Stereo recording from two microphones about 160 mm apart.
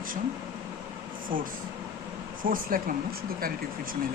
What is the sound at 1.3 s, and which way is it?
Speech, 60° right (ahead or behind).